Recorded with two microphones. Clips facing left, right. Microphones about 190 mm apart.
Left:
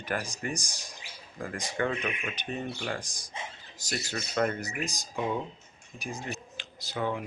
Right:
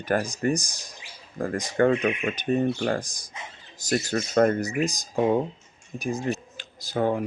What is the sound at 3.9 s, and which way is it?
Speech, 45° right (ahead or behind).